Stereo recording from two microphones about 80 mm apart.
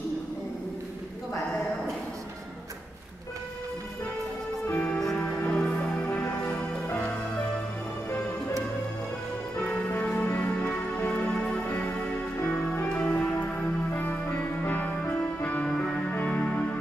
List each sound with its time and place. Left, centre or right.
5.0 s music: centre
9.7 s music: centre
12.4 s music: left
12.8 s music: centre